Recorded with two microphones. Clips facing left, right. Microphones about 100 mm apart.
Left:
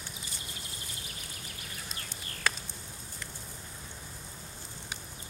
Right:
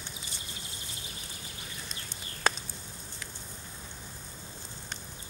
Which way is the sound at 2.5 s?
25° right (ahead or behind).